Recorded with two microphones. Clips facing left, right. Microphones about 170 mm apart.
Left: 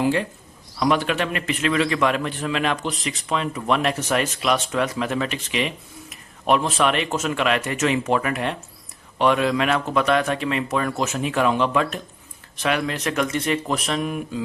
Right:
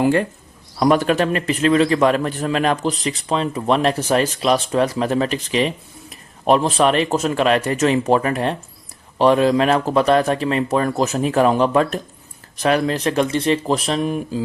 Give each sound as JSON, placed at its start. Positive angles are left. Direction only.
{"t": 0.0, "sound": "a man's voice", "side_deg": -50}